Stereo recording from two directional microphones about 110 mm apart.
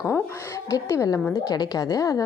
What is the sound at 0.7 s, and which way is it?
A woman's voice, 30° left (ahead or behind).